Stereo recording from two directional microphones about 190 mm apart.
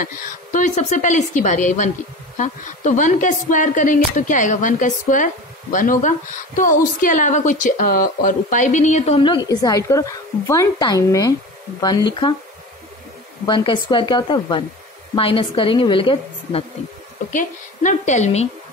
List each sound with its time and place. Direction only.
0.0 s a woman's voice: 40° left (ahead or behind); by 12.4 s 25° left (ahead or behind)
13.5 s a woman's voice: 25° left (ahead or behind)
17.3 s a woman's voice: 40° left (ahead or behind)